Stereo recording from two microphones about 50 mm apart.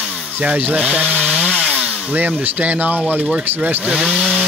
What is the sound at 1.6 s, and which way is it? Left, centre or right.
Speech, right.